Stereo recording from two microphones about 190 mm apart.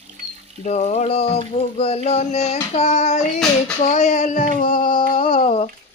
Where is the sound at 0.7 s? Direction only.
35° left (ahead or behind).